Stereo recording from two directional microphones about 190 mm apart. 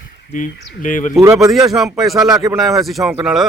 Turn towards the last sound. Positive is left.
turn(degrees=0)  # may be behind; listen again after turning